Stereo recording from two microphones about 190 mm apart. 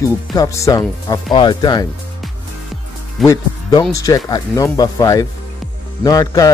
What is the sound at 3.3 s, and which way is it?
Speech, 20° left (ahead or behind).